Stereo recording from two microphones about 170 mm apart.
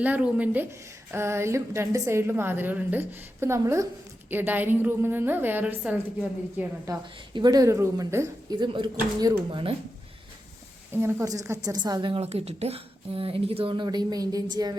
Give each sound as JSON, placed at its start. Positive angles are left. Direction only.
{"t": 0.0, "sound": "a woman's voice", "side_deg": -10}
{"t": 6.9, "sound": "a woman's voice", "side_deg": -20}
{"t": 10.9, "sound": "a woman's voice", "side_deg": -15}